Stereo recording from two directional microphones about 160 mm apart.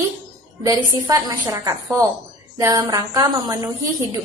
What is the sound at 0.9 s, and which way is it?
A woman's voice, 25° right (ahead or behind).